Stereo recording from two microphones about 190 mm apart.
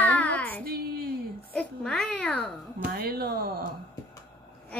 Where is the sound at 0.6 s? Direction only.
55° right (ahead or behind).